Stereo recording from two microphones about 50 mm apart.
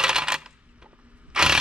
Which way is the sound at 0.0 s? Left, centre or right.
Centre.